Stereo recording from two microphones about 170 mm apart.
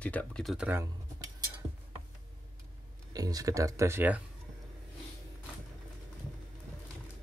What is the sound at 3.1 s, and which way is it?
Speech, 20° right (ahead or behind).